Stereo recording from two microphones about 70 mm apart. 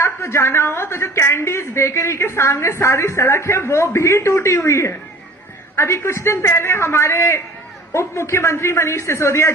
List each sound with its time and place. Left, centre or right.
0.0 s a woman's voice: left